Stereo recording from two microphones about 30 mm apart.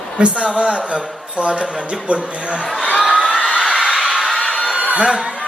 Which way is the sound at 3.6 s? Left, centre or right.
Right.